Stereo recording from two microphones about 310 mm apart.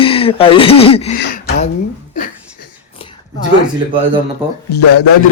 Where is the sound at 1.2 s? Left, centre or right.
Left.